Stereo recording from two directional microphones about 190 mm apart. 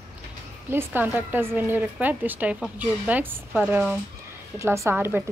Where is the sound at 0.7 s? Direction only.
10° right (ahead or behind).